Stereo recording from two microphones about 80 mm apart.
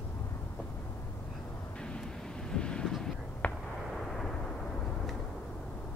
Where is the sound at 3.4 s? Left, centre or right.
Centre.